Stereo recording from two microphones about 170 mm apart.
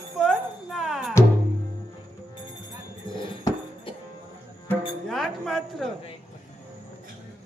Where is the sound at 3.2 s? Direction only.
30° left (ahead or behind).